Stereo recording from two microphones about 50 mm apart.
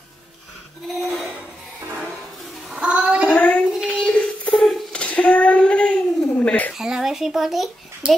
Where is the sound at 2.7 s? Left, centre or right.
Right.